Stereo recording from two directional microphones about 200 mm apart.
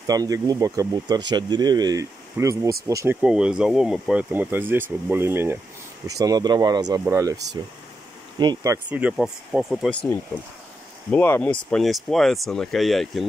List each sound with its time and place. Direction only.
0.0 s speech: 20° right (ahead or behind)
3.2 s speech: 5° right (ahead or behind)
8.4 s speech: 20° right (ahead or behind)
8.7 s speech: 10° right (ahead or behind)
11.1 s speech: 10° left (ahead or behind)